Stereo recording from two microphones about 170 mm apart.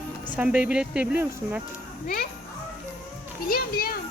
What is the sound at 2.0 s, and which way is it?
Speech, 60° left (ahead or behind).